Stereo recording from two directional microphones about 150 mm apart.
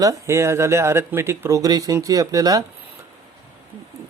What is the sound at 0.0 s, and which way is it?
Speech, 20° right (ahead or behind).